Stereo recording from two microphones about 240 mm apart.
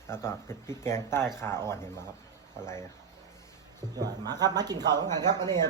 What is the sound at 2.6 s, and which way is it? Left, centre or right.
Speech, centre.